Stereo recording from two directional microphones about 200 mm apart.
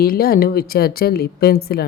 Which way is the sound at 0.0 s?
50° left (ahead or behind).